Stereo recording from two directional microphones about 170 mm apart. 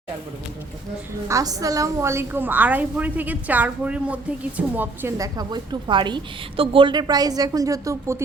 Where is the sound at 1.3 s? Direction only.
20° right (ahead or behind).